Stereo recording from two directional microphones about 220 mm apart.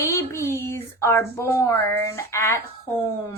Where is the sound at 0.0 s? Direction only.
10° left (ahead or behind).